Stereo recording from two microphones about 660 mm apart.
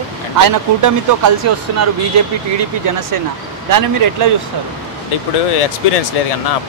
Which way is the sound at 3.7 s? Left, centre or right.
Right.